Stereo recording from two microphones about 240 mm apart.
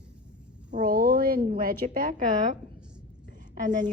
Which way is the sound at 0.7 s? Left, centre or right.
Right.